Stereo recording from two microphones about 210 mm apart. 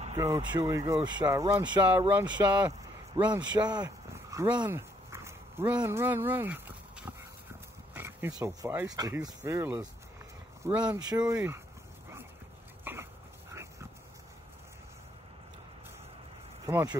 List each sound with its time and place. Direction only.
0.2 s speech: 15° right (ahead or behind)
2.4 s speech: 5° right (ahead or behind)
3.3 s speech: 20° right (ahead or behind)
11.0 s speech: 20° right (ahead or behind)
12.8 s dog: 10° right (ahead or behind)
16.6 s speech: 15° right (ahead or behind)